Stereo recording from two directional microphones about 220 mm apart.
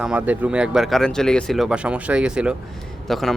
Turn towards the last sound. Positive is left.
turn(degrees=0)  # may be behind; listen again after turning